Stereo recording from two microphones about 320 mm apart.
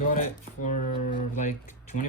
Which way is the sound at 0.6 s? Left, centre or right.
Left.